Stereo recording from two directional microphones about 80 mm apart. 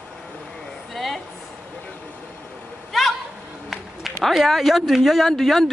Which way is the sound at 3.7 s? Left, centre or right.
Centre.